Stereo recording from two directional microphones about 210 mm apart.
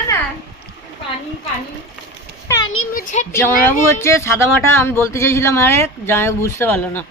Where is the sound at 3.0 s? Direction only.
40° left (ahead or behind).